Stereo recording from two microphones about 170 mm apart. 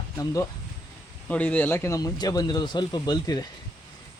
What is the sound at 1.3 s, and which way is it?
Speech, 10° left (ahead or behind).